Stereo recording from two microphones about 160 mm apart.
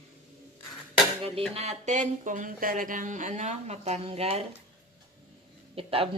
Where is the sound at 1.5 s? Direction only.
45° right (ahead or behind).